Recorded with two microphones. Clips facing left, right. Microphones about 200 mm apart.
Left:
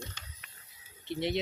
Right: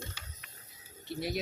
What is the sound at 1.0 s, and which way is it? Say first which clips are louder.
Speech: left 3 dB; 25° left (ahead or behind).